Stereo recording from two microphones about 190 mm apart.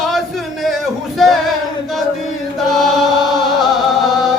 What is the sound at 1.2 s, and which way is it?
Male singing, centre (ahead or behind).